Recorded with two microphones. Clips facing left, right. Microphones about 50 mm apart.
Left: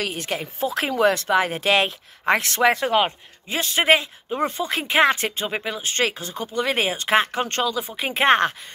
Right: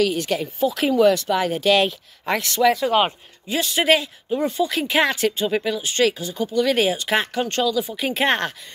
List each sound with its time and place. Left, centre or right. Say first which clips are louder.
0.0 s speech: right 6 dB; left
3.4 s speech: even; left
4.4 s speech: right 2 dB; left